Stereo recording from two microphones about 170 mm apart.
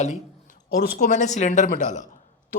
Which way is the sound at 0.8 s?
50° left (ahead or behind).